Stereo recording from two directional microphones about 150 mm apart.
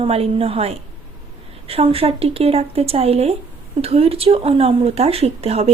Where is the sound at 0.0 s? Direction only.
40° right (ahead or behind).